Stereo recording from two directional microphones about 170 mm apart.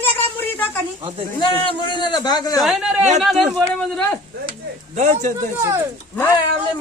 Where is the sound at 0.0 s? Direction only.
10° left (ahead or behind).